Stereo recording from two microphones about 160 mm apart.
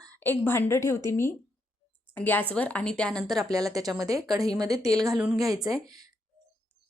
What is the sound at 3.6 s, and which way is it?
A woman's voice, 20° right (ahead or behind).